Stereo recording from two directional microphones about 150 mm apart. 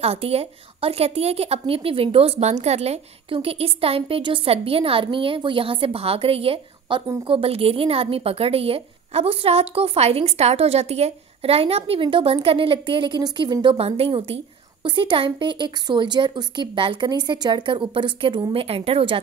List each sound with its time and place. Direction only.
0.0 s a woman's voice: 40° right (ahead or behind)